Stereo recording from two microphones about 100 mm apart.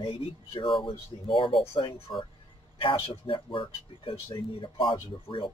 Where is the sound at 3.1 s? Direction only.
60° left (ahead or behind).